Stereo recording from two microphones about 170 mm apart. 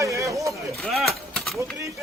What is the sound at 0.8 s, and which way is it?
Speech, centre (ahead or behind).